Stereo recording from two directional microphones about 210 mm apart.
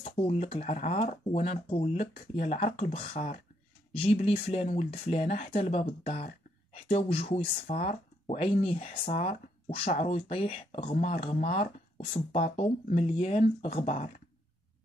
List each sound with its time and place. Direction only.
0.0 s speech: 30° left (ahead or behind)
9.1 s speech: 40° left (ahead or behind)